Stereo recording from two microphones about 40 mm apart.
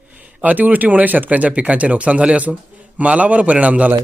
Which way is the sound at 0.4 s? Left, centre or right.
Right.